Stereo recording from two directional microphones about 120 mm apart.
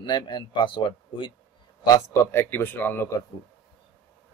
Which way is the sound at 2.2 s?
20° left (ahead or behind).